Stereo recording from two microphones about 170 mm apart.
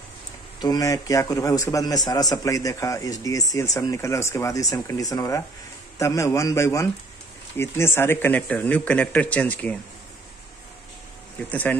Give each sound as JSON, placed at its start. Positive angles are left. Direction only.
{"t": 0.6, "sound": "a man's voice", "side_deg": 20}